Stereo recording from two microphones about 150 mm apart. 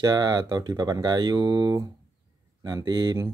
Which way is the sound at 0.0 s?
25° right (ahead or behind).